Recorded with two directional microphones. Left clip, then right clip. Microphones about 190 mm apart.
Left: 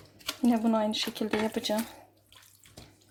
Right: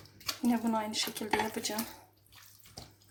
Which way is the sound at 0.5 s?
35° left (ahead or behind).